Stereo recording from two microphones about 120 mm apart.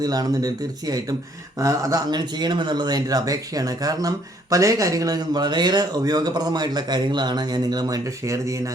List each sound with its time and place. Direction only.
0.0 s speech: 30° right (ahead or behind)